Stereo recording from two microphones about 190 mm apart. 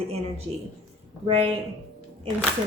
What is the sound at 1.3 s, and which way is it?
Speech, 30° right (ahead or behind).